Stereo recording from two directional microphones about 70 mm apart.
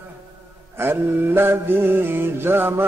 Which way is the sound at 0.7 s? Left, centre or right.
Right.